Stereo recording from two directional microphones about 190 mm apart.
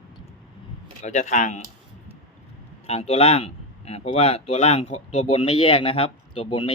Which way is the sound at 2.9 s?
30° left (ahead or behind).